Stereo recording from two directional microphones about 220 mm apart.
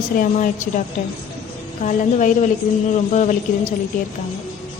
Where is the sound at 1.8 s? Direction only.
35° left (ahead or behind).